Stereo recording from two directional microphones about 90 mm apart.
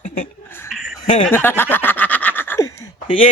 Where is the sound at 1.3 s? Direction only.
25° left (ahead or behind).